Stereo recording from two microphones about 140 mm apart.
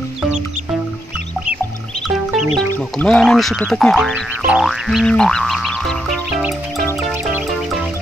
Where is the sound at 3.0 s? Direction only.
5° left (ahead or behind).